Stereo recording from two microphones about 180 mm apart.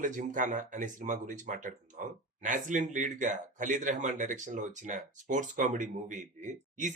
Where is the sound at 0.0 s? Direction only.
45° right (ahead or behind).